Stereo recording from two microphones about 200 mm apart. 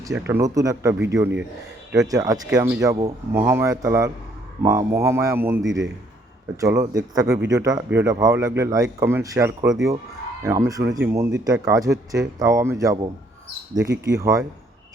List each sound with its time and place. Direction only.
0.0 s speech: 15° right (ahead or behind)